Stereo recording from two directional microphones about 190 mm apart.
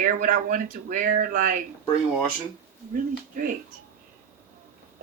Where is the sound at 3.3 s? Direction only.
45° right (ahead or behind).